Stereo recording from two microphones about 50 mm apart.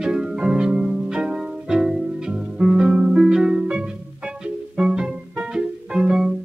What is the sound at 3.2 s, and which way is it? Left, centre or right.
Harp, centre.